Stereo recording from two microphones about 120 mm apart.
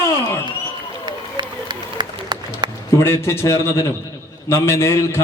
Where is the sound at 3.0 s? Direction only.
20° left (ahead or behind).